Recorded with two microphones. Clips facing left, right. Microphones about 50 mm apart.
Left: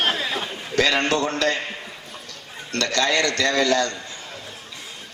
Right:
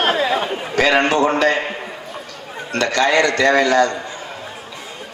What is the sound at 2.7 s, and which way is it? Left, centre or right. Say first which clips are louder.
A man's voice: right 5 dB; right.